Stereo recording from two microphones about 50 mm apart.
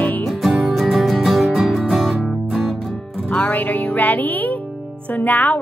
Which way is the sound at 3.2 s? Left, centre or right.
Left.